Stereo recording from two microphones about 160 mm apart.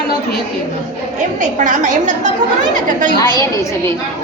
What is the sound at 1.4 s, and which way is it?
Speech, 50° right (ahead or behind).